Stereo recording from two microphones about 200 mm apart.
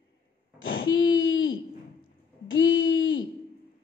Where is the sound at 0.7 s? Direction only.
65° left (ahead or behind).